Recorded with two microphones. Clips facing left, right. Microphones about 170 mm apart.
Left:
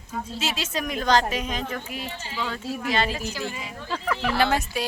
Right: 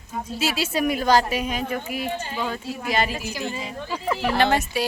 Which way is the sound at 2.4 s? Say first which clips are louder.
Right 1 dB; 15° right (ahead or behind).